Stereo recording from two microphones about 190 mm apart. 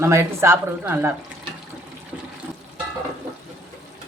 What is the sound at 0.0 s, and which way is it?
Speech, 15° right (ahead or behind).